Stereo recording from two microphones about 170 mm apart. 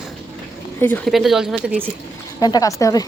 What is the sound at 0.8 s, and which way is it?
Speech, 5° left (ahead or behind).